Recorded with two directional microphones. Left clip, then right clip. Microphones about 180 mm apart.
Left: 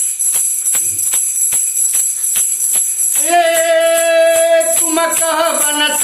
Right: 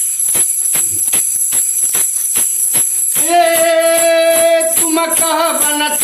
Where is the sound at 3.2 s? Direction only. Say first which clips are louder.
Right 1 dB; 15° left (ahead or behind).